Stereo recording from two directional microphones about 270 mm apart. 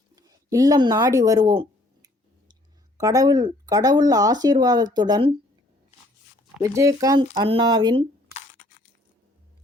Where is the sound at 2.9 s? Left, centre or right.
Centre.